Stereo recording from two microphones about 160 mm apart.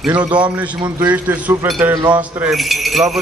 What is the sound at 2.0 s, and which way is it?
Speech, 25° right (ahead or behind).